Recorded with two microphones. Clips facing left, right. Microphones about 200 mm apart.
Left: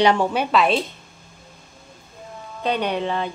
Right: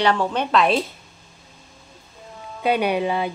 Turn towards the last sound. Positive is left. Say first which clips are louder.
# right 2 dB
turn(degrees=-10)  # may be behind; listen again after turning